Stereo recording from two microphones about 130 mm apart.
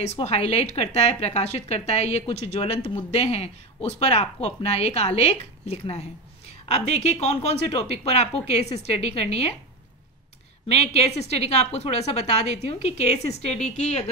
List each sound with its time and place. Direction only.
0.0 s speech: 55° left (ahead or behind)
10.7 s speech: 55° left (ahead or behind)